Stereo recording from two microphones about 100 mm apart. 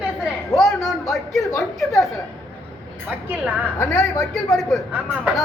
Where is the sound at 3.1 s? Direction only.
15° right (ahead or behind).